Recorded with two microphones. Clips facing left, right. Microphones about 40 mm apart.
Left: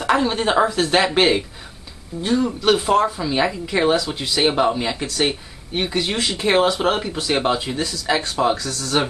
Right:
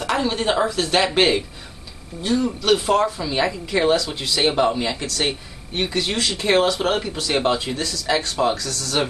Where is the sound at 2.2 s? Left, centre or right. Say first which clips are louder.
Left 1 dB; left.